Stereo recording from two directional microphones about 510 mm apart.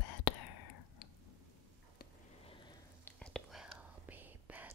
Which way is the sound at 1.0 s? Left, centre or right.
Left.